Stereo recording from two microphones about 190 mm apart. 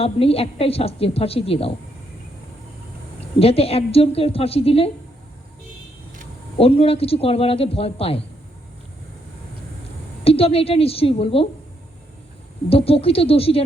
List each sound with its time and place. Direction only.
0.0 s a woman's voice: 30° left (ahead or behind)
3.3 s a woman's voice: 30° left (ahead or behind)
6.6 s a woman's voice: 30° left (ahead or behind)
10.2 s a woman's voice: 30° left (ahead or behind)
12.6 s a woman's voice: 30° left (ahead or behind)